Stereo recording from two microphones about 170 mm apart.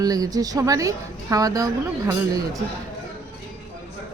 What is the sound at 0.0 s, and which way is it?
A woman's voice, 20° right (ahead or behind).